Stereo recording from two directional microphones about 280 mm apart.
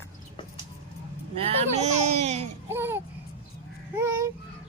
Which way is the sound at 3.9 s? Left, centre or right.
Centre.